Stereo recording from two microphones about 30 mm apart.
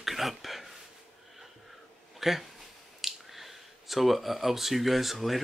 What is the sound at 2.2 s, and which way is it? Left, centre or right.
Speech, centre.